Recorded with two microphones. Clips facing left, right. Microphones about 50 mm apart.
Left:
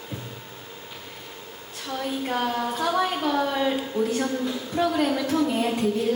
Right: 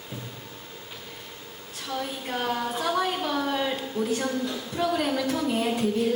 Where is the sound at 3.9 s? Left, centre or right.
Left.